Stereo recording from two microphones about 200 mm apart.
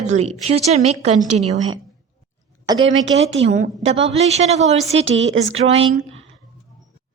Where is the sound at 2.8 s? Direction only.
70° right (ahead or behind).